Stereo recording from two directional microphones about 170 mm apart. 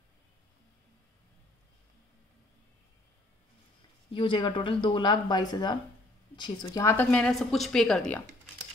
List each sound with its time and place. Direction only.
4.1 s a woman's voice: 30° left (ahead or behind); by 8.2 s 5° left (ahead or behind)